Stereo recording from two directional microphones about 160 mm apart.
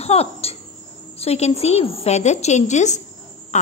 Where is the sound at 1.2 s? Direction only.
40° left (ahead or behind).